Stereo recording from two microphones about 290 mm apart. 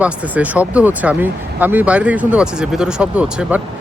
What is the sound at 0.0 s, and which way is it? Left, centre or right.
Speech, centre.